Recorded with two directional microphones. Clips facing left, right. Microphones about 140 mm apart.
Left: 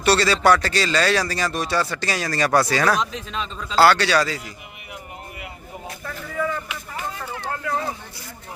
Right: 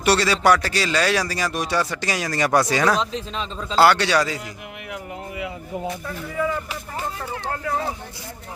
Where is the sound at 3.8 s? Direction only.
20° right (ahead or behind).